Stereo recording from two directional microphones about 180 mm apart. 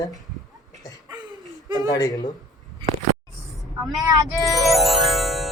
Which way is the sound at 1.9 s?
20° left (ahead or behind).